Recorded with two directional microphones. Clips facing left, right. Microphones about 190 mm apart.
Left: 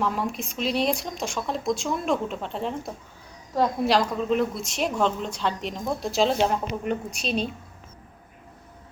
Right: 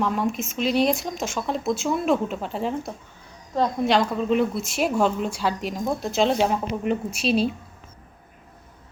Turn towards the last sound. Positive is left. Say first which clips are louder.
# right 6 dB
turn(degrees=-5)  # may be behind; listen again after turning